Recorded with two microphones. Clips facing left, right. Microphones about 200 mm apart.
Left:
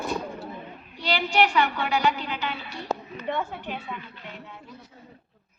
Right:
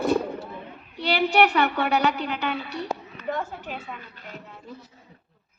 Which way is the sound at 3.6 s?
45° right (ahead or behind).